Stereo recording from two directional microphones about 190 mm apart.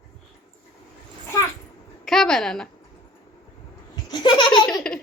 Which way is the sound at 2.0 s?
Centre (ahead or behind).